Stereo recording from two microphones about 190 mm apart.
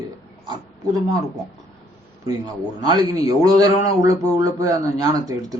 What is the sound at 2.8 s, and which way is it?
Speech, 20° right (ahead or behind).